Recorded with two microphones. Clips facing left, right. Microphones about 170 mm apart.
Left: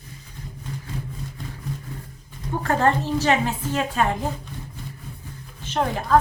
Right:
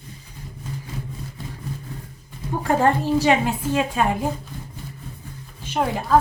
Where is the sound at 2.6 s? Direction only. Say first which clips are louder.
Right 2 dB; 10° right (ahead or behind).